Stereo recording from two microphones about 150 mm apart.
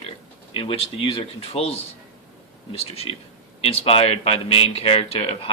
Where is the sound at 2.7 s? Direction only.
40° left (ahead or behind).